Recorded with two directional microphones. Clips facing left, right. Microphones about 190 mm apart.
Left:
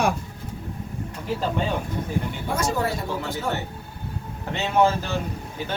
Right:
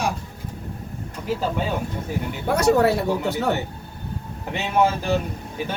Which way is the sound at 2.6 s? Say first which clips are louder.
Right 9 dB; 65° right (ahead or behind).